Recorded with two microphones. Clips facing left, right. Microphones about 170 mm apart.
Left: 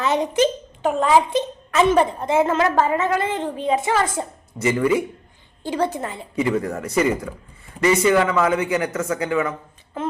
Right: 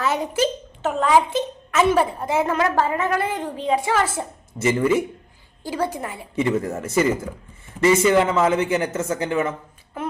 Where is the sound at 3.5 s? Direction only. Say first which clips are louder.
Even; 20° left (ahead or behind).